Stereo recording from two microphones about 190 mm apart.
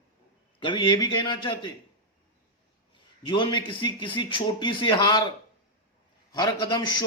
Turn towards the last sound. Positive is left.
turn(degrees=20)  # may be behind; listen again after turning